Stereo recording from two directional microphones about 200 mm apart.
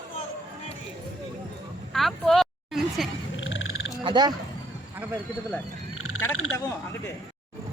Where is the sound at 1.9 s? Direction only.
Centre (ahead or behind).